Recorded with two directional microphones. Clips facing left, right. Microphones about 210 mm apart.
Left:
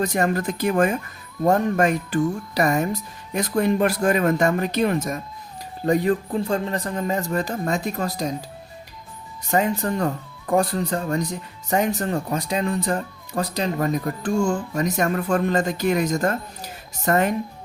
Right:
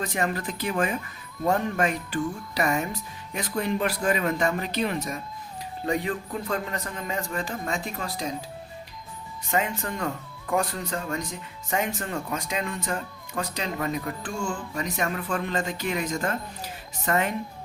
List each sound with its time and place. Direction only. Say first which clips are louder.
0.0 s speech: left 6 dB; 40° left (ahead or behind)
6.3 s speech: left 6 dB; 30° left (ahead or behind)
9.5 s speech: left 6 dB; 40° left (ahead or behind)